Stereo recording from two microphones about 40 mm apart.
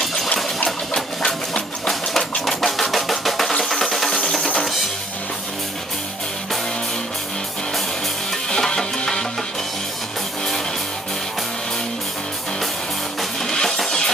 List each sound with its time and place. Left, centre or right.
0.0 s a sound: centre
2.4 s music: centre
8.5 s music: centre
13.4 s music: centre